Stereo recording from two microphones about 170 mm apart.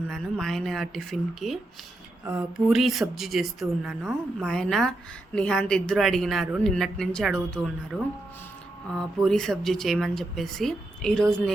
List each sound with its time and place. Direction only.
0.1 s speech: centre (ahead or behind)